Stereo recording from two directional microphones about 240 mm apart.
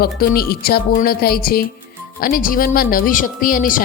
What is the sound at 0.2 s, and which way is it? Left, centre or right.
A woman's voice, left.